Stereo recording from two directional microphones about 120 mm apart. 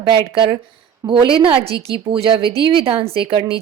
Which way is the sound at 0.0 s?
45° right (ahead or behind).